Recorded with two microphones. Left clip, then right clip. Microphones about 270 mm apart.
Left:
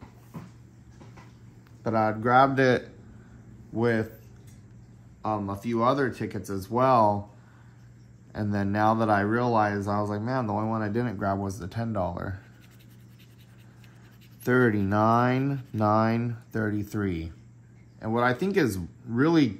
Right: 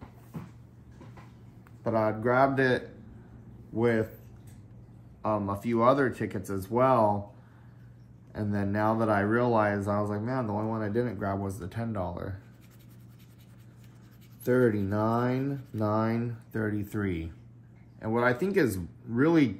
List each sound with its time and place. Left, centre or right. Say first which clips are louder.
1.8 s speech: left 2 dB; centre
5.2 s speech: even; centre
8.3 s speech: left 2 dB; centre
10.1 s speech: left 3 dB; centre
14.4 s speech: left 2 dB; left